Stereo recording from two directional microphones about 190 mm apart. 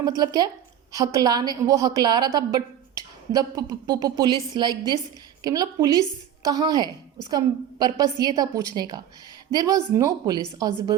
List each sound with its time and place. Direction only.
0.2 s a woman's voice: 20° right (ahead or behind)